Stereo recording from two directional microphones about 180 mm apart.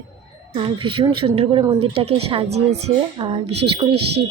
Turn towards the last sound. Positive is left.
turn(degrees=-30)  # may be behind; listen again after turning